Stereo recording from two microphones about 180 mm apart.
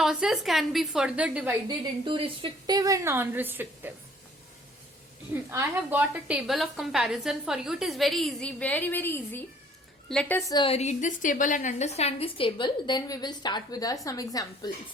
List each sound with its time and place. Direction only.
0.0 s a woman's voice: 5° right (ahead or behind)
1.6 s a woman's voice: 30° right (ahead or behind); by 3.9 s 10° right (ahead or behind)
5.3 s a woman's voice: 15° right (ahead or behind); by 10.4 s 5° left (ahead or behind)
10.5 s a woman's voice: 30° left (ahead or behind)